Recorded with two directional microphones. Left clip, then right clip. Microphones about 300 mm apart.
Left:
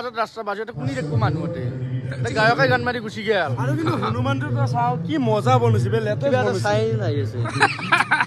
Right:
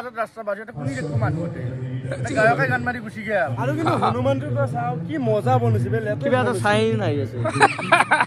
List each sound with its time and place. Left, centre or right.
2.3 s a man's voice: left
3.8 s speech: centre
5.1 s a man's voice: centre
6.3 s speech: right
7.4 s speech: centre